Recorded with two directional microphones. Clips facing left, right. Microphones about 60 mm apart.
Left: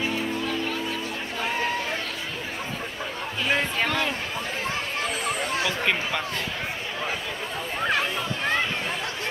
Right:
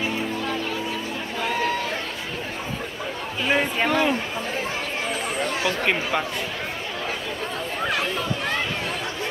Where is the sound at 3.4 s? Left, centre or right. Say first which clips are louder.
Right 3 dB; centre.